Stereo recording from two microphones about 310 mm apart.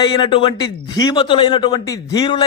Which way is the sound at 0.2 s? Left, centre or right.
Centre.